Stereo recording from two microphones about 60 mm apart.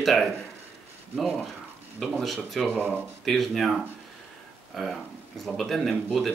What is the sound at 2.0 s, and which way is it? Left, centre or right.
Speech, centre.